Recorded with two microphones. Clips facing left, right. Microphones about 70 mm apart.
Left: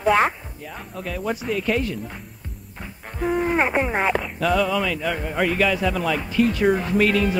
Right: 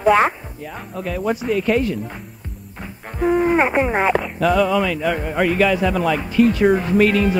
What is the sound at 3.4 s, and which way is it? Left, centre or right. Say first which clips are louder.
Speech: right 3 dB; centre.